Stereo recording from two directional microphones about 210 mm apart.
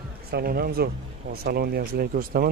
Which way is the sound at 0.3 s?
45° right (ahead or behind).